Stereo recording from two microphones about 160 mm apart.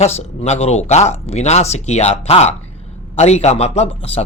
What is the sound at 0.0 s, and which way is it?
A man's voice, 45° left (ahead or behind).